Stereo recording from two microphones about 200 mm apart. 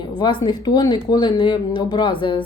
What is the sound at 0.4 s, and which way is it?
A woman's voice, 20° left (ahead or behind).